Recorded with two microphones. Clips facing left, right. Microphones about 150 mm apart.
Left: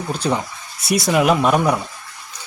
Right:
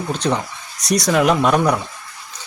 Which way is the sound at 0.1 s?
10° left (ahead or behind).